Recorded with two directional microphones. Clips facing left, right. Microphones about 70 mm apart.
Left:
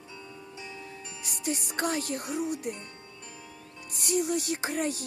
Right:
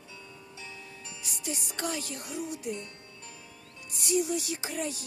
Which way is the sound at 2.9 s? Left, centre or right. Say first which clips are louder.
Left 2 dB; left.